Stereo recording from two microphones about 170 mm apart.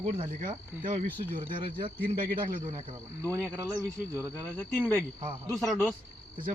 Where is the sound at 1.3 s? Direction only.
35° right (ahead or behind).